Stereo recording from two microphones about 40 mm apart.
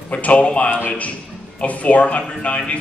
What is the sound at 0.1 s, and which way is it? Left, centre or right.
Speech, left.